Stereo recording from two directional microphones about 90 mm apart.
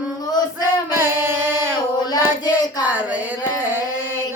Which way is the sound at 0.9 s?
25° right (ahead or behind).